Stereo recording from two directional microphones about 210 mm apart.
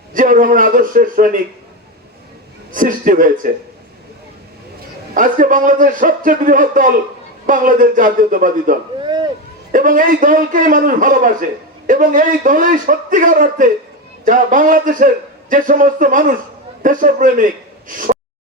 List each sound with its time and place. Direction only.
0.1 s a man's voice: 40° right (ahead or behind)
2.7 s a man's voice: 40° right (ahead or behind)
5.1 s a man's voice: 40° right (ahead or behind)
9.7 s a man's voice: 40° right (ahead or behind)